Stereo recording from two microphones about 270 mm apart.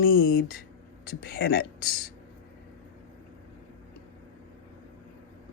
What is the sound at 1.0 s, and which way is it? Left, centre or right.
Speech, left.